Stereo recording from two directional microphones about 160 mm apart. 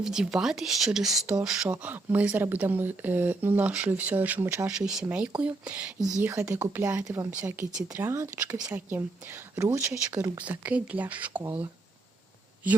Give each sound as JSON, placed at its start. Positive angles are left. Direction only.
{"t": 0.0, "sound": "speech", "side_deg": -5}
{"t": 1.6, "sound": "speech", "side_deg": -15}
{"t": 10.3, "sound": "speech", "side_deg": -10}